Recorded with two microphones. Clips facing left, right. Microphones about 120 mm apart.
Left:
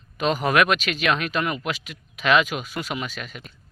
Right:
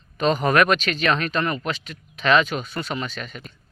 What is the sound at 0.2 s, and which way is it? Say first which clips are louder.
A man's voice: right 2 dB; 5° left (ahead or behind).